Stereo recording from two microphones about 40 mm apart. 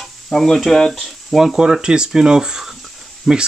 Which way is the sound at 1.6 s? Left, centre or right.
Centre.